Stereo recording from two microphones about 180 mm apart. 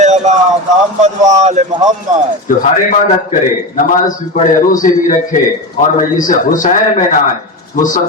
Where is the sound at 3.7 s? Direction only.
45° left (ahead or behind).